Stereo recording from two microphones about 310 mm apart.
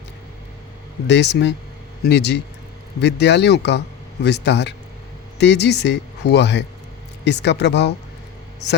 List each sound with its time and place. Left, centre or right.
1.0 s speech: left